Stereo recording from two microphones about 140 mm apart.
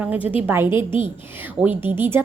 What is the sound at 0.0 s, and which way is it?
A woman's voice, 10° right (ahead or behind).